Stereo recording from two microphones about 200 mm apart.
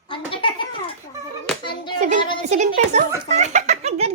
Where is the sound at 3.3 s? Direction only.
35° right (ahead or behind).